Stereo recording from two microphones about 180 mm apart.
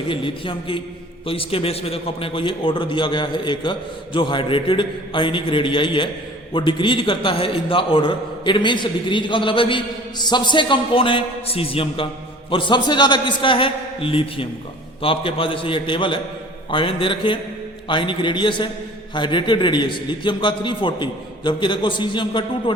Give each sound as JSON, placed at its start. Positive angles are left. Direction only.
{"t": 0.1, "sound": "a man's voice", "side_deg": 30}